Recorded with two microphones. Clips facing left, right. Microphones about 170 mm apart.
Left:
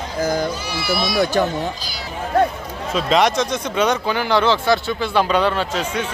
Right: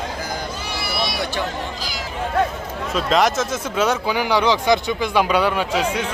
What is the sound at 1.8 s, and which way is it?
Speech, 90° right.